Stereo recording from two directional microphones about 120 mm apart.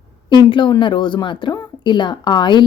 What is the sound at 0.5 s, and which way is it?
Speech, 40° left (ahead or behind).